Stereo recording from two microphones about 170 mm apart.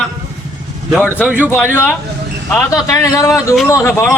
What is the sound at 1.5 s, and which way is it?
Speech, 10° left (ahead or behind).